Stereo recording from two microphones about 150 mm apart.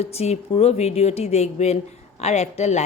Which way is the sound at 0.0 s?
45° left (ahead or behind).